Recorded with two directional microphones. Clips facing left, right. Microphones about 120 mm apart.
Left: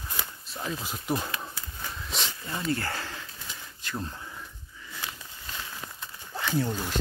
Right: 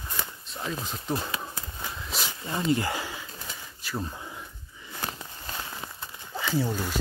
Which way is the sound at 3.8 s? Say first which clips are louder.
Right 2 dB; 5° right (ahead or behind).